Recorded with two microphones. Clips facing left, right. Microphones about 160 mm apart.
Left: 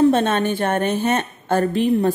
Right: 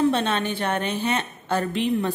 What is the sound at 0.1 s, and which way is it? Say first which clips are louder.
A woman's voice: left 6 dB; 45° left (ahead or behind).